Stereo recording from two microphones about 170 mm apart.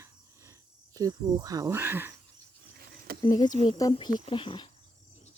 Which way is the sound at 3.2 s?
25° left (ahead or behind).